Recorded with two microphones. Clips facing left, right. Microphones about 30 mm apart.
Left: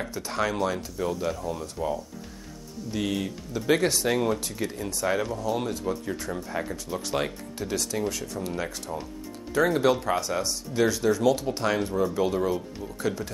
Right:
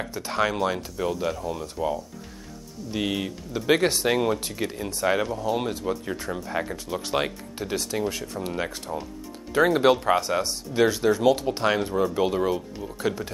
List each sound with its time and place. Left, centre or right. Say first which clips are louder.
0.2 s speech: right 3 dB; centre